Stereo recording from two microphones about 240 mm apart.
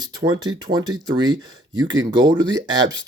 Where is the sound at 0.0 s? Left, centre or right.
Centre.